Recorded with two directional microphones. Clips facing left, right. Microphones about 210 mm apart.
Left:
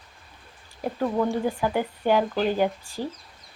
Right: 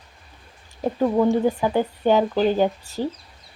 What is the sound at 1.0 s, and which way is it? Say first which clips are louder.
Speech: right 6 dB; 20° right (ahead or behind).